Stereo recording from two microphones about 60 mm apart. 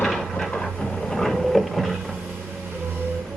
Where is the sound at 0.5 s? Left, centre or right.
Centre.